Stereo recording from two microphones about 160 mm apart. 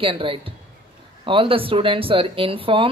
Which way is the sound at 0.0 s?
35° right (ahead or behind).